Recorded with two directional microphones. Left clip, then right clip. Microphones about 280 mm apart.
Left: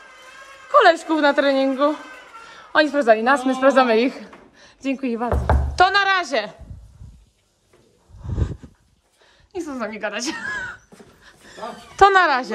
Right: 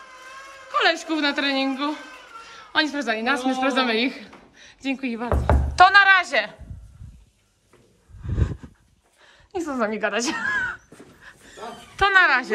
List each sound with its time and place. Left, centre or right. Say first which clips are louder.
0.7 s a sound: left 7 dB; centre
1.0 s a woman's voice: left 6 dB; centre
5.3 s speech: left 1 dB; centre
8.2 s a sound: even; centre
9.2 s crow: right 1 dB; centre
12.0 s speech: left 3 dB; centre